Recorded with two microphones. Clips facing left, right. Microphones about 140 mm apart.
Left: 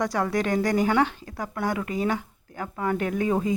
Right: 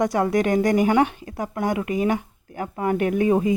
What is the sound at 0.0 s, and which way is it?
A woman's voice, 20° right (ahead or behind).